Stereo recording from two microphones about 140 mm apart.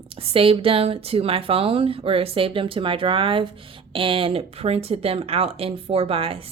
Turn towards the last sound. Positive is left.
turn(degrees=-40)  # may be behind; listen again after turning